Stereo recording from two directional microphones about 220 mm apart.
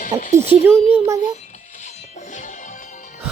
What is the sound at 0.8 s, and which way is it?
Speech, 25° left (ahead or behind).